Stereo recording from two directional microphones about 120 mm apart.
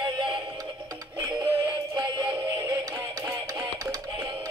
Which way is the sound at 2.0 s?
35° right (ahead or behind).